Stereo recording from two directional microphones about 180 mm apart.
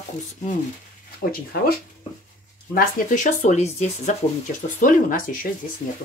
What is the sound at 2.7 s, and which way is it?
Speech, 45° left (ahead or behind).